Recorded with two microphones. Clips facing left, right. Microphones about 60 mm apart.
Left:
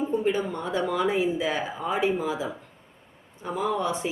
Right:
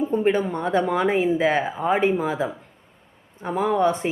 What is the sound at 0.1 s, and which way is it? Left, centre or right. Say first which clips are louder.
A woman's voice: right 4 dB; right.